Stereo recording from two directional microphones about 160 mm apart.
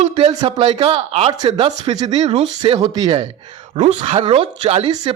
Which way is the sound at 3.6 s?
40° right (ahead or behind).